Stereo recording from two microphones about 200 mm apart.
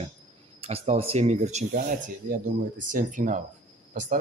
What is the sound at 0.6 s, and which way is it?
Speech, 30° right (ahead or behind).